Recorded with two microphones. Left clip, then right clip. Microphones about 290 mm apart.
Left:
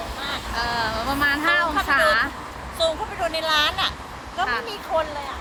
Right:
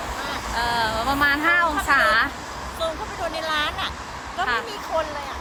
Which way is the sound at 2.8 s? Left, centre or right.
Centre.